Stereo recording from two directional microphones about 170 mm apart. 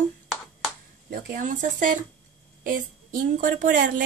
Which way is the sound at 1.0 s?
55° right (ahead or behind).